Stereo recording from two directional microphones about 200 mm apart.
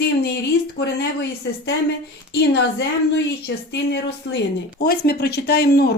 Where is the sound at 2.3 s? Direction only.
60° left (ahead or behind).